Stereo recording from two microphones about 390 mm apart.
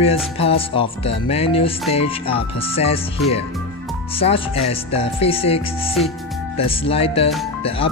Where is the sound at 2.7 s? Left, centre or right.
Centre.